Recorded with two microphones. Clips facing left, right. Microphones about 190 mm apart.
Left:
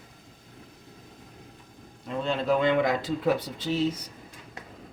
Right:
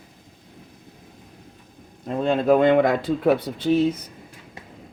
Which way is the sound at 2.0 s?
50° right (ahead or behind).